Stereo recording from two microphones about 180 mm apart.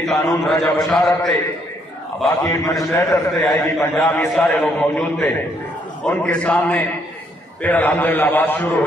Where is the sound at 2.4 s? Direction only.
20° left (ahead or behind).